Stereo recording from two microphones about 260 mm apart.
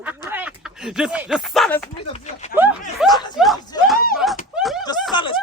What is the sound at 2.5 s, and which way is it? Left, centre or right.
Speech, centre.